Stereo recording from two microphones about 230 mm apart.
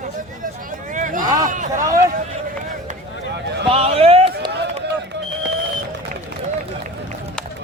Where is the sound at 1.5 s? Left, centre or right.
Right.